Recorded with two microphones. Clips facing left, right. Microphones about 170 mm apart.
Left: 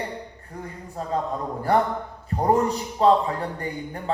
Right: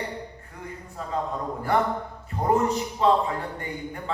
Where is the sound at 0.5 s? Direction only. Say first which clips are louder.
Left 4 dB; 35° left (ahead or behind).